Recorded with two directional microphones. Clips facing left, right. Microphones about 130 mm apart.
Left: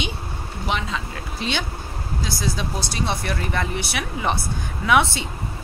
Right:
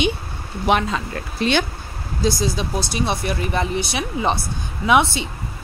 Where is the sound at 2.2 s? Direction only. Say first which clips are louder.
Right 7 dB; 20° right (ahead or behind).